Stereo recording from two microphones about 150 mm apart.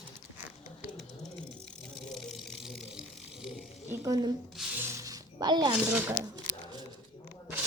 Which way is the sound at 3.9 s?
25° right (ahead or behind).